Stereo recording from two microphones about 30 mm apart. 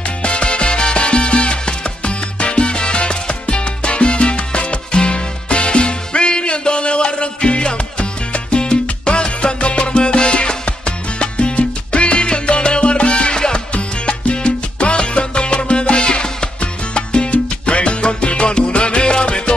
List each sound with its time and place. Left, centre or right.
0.2 s music: left
11.1 s salsa music: left
11.5 s music: left
13.7 s salsa music: left
17.6 s music: left